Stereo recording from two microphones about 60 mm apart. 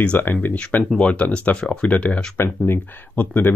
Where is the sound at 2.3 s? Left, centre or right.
Left.